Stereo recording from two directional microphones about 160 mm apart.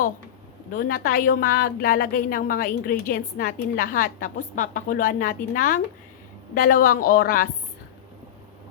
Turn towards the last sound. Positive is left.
turn(degrees=65)  # may be behind; listen again after turning